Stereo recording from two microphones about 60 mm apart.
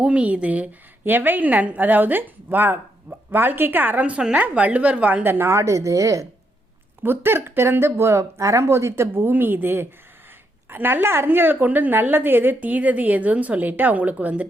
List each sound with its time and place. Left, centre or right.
0.0 s a woman's voice: centre; by 5.5 s right
5.5 s speech: right
7.0 s a woman's voice: right